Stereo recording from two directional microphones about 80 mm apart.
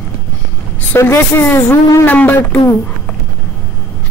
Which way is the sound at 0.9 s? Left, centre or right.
Left.